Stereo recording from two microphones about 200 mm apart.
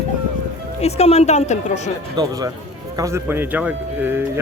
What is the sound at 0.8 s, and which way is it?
Speech, 30° left (ahead or behind).